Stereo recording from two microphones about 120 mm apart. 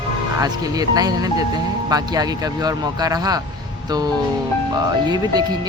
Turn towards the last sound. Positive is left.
turn(degrees=-35)  # may be behind; listen again after turning